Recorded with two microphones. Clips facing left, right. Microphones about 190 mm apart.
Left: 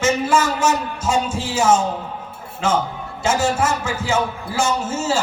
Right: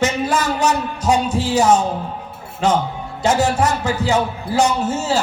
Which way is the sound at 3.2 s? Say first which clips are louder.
Right 2 dB; 35° right (ahead or behind).